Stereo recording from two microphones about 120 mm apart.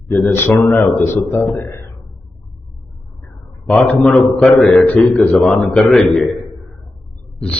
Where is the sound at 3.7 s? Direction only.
10° left (ahead or behind).